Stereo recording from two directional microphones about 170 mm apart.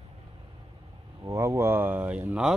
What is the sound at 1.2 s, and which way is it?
A man's voice, 15° right (ahead or behind).